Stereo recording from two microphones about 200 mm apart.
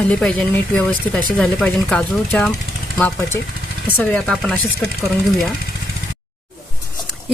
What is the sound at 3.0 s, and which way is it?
Speech, 15° left (ahead or behind).